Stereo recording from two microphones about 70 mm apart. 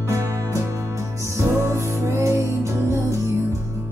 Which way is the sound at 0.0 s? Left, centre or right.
Right.